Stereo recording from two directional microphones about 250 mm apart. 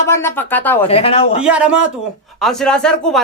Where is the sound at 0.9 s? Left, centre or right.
Left.